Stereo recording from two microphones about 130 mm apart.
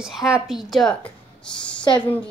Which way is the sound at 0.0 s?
5° right (ahead or behind).